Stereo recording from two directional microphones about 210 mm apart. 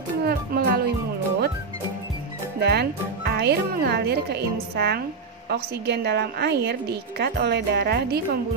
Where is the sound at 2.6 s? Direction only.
50° right (ahead or behind).